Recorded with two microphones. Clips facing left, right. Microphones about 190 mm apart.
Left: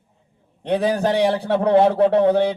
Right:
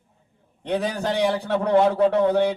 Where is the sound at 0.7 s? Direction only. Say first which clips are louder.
Left 5 dB; 60° left (ahead or behind).